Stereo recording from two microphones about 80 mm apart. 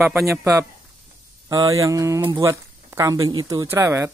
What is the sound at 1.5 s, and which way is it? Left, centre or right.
Speech, right.